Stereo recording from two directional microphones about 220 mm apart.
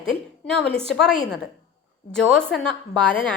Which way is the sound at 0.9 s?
Centre (ahead or behind).